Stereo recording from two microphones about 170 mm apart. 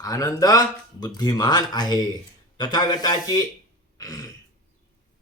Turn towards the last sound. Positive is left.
turn(degrees=20)  # may be behind; listen again after turning